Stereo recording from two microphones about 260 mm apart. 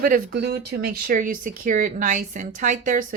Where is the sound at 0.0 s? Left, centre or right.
Right.